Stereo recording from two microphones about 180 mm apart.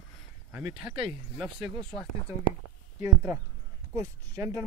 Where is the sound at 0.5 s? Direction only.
10° right (ahead or behind).